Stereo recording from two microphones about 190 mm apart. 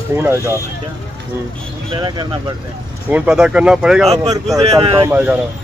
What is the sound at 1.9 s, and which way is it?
Speech, 20° right (ahead or behind).